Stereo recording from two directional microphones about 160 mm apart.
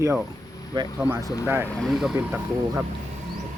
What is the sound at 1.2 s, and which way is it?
Speech, 20° left (ahead or behind).